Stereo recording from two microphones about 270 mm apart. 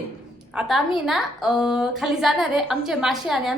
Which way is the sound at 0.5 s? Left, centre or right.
Centre.